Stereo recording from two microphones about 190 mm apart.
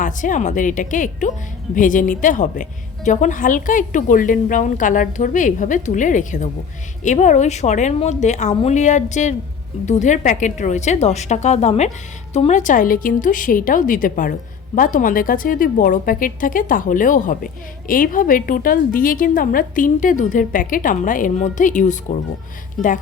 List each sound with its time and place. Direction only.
0.0 s a woman's voice: 40° left (ahead or behind)